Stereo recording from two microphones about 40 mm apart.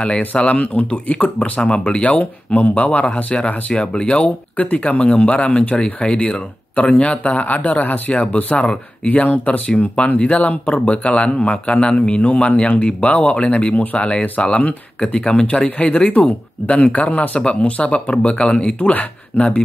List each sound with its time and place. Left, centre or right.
0.4 s speech: left
1.6 s speech: left
3.9 s speech: left
4.6 s speech: left
8.1 s speech: left
16.1 s speech: left
18.8 s speech: left